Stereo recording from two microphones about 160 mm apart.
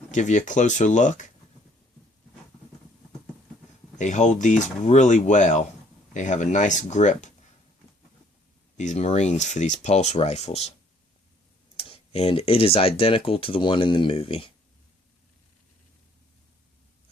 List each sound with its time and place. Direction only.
0.1 s speech: 50° left (ahead or behind)
3.9 s speech: 50° left (ahead or behind)
8.8 s speech: 45° left (ahead or behind)
11.8 s speech: 40° left (ahead or behind)